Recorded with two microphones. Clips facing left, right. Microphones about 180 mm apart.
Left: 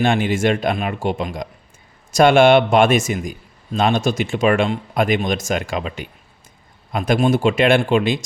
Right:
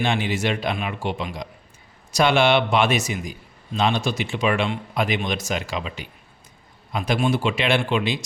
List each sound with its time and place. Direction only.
0.0 s a man's voice: 50° left (ahead or behind)